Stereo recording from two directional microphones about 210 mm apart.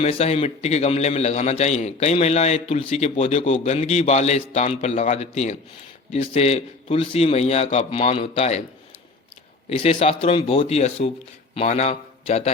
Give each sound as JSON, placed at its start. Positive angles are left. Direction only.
{"t": 0.0, "sound": "a man's voice", "side_deg": 30}
{"t": 9.6, "sound": "a man's voice", "side_deg": 30}